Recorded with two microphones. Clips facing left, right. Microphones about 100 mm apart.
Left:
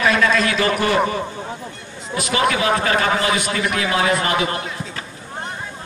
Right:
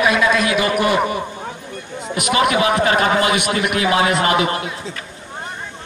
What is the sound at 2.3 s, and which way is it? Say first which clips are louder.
Speech: right 2 dB; 20° right (ahead or behind).